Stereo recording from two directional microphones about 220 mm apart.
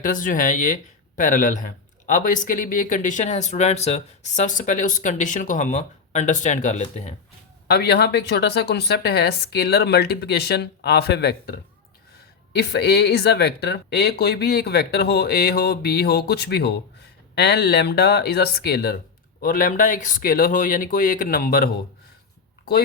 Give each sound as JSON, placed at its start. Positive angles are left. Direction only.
{"t": 0.0, "sound": "speech", "side_deg": 35}
{"t": 7.7, "sound": "speech", "side_deg": 50}
{"t": 12.5, "sound": "speech", "side_deg": 50}